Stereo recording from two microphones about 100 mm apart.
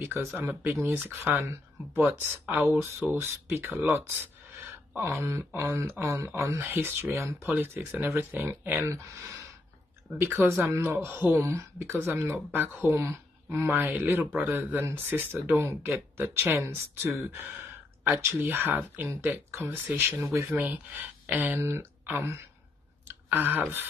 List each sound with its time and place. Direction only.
0.0 s speech: 25° right (ahead or behind)
0.3 s speech: 15° right (ahead or behind)
8.9 s speech: 30° right (ahead or behind)